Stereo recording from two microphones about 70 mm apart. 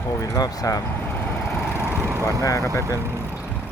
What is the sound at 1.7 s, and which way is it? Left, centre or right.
Vehicle, right.